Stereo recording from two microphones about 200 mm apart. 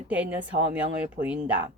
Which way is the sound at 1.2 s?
45° right (ahead or behind).